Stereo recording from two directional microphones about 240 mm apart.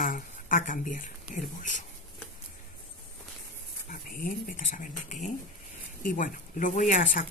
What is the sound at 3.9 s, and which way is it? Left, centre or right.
Speech, left.